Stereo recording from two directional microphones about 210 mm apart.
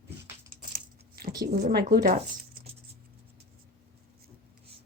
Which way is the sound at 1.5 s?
35° right (ahead or behind).